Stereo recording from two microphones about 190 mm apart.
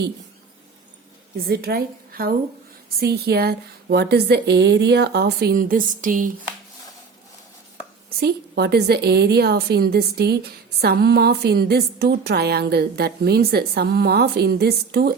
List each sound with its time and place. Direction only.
1.5 s a woman's voice: 55° right (ahead or behind)
8.2 s a woman's voice: 60° right (ahead or behind)